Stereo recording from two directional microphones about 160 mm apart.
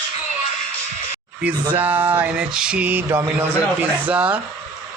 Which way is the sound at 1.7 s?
10° right (ahead or behind).